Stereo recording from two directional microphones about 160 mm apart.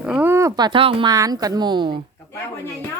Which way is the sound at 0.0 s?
10° right (ahead or behind).